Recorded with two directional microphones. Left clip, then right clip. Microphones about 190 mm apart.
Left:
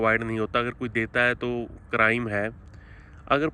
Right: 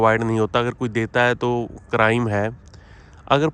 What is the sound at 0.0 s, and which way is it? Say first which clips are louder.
Speech: right 6 dB; 15° right (ahead or behind).